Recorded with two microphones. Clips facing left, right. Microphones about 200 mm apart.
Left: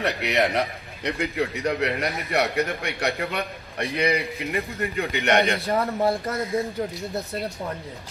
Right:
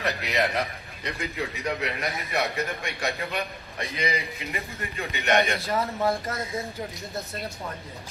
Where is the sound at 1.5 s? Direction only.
65° left (ahead or behind).